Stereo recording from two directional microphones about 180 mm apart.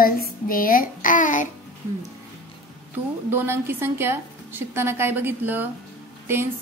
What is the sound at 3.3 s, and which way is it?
A woman's voice, 10° right (ahead or behind).